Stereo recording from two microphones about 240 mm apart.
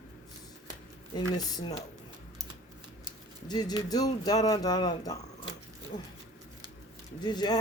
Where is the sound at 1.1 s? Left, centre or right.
Centre.